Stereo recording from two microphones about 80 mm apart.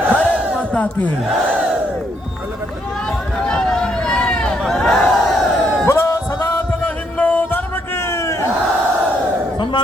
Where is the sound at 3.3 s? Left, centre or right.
Centre.